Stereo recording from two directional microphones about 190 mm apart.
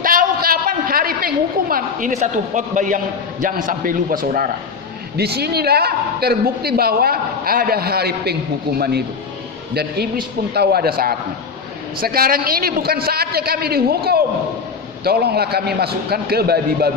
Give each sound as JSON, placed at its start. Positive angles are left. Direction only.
{"t": 0.0, "sound": "a woman's voice", "side_deg": -50}
{"t": 5.1, "sound": "a man's voice", "side_deg": -60}
{"t": 10.5, "sound": "a man's voice", "side_deg": -55}